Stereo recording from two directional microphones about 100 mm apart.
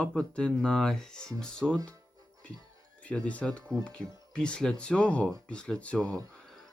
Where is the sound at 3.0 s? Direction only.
10° left (ahead or behind).